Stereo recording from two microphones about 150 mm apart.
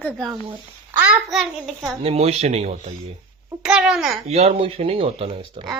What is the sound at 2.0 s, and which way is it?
Speech, 45° right (ahead or behind).